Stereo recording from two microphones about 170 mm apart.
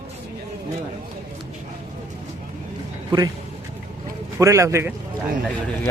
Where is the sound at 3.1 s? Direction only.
20° right (ahead or behind).